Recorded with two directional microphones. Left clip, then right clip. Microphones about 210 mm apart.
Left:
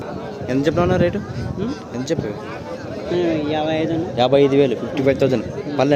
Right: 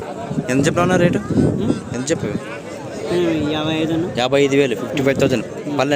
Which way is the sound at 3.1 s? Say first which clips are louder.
Right 1 dB; 45° right (ahead or behind).